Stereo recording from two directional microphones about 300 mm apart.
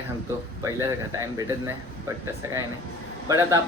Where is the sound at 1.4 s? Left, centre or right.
Centre.